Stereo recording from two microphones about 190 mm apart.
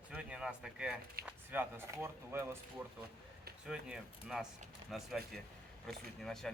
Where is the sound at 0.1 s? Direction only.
5° right (ahead or behind).